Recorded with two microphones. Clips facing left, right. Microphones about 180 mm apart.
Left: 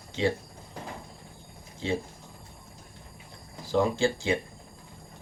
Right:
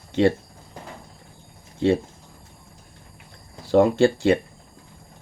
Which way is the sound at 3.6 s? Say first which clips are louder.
Right 8 dB; 65° right (ahead or behind).